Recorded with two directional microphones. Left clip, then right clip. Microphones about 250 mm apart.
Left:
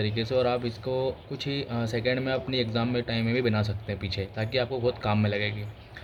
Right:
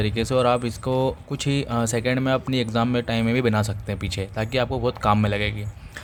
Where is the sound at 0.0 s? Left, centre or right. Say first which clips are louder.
Right 5 dB; right.